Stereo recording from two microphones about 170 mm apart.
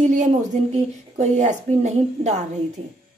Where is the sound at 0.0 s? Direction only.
45° right (ahead or behind).